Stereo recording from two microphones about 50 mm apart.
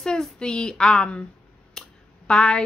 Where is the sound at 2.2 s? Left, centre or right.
Centre.